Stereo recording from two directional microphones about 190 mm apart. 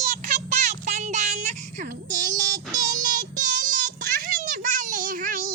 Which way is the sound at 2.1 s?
40° right (ahead or behind).